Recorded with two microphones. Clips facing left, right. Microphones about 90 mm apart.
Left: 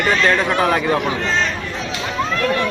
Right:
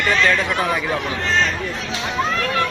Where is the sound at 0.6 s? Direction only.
55° left (ahead or behind).